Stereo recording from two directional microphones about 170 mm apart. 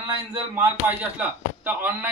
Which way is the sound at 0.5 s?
10° right (ahead or behind).